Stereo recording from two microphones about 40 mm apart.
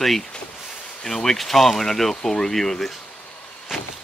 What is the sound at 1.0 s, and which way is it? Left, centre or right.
Speech, centre.